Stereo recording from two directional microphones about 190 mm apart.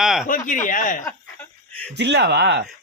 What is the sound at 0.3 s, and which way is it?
Speech, 45° left (ahead or behind).